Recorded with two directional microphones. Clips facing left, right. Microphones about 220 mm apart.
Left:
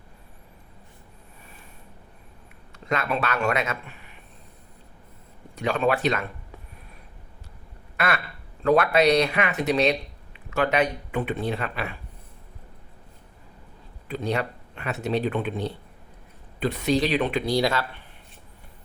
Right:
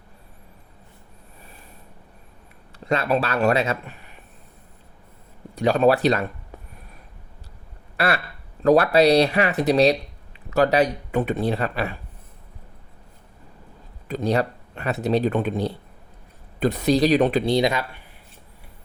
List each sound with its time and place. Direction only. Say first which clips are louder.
2.8 s speech: right 4 dB; 30° right (ahead or behind)
5.5 s speech: right 6 dB; 35° right (ahead or behind)
7.9 s quack: right 3 dB; 35° right (ahead or behind)
8.6 s speech: right 3 dB; 35° right (ahead or behind)
14.1 s speech: right 5 dB; 40° right (ahead or behind)
17.4 s speech: right 3 dB; 20° right (ahead or behind)